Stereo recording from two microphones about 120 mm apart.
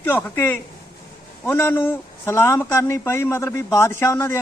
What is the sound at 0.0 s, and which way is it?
A man's voice, 15° left (ahead or behind).